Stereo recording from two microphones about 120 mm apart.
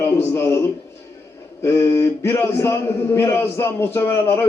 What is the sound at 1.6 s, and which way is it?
A man's voice, 20° left (ahead or behind).